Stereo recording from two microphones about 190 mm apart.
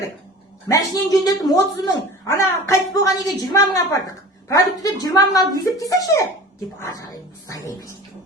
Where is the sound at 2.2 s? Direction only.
15° left (ahead or behind).